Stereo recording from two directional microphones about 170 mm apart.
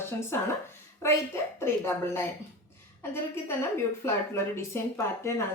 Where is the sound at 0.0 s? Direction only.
15° left (ahead or behind).